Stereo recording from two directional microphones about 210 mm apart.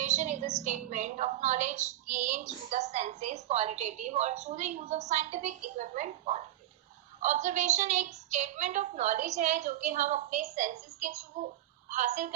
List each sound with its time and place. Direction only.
0.0 s a woman's voice: 35° right (ahead or behind)